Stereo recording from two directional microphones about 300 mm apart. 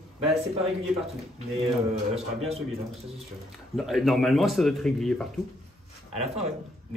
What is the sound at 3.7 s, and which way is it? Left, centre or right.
Speech, centre.